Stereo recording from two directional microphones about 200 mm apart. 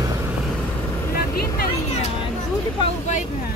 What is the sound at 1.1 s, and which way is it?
Vehicle, 45° left (ahead or behind).